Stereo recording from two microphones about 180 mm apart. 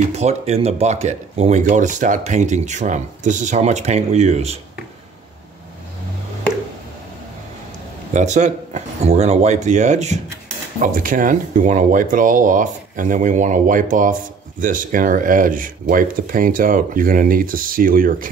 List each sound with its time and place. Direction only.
0.1 s speech: 35° right (ahead or behind)
8.1 s speech: 40° right (ahead or behind)